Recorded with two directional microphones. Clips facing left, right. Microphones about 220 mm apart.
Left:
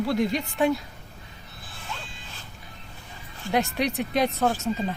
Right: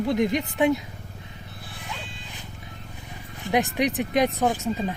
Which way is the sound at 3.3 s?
15° right (ahead or behind).